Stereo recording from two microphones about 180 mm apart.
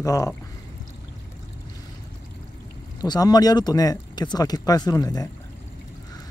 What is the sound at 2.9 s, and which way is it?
Speech, 20° left (ahead or behind).